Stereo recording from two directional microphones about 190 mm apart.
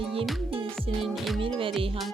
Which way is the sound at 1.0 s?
Centre (ahead or behind).